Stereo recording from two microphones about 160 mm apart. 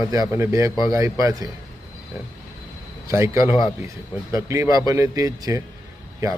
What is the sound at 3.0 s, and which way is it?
Speech, 20° right (ahead or behind).